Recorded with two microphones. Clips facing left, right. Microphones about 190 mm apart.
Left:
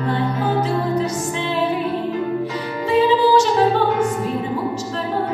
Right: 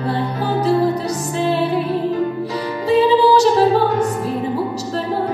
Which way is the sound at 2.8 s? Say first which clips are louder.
Right 2 dB; 35° right (ahead or behind).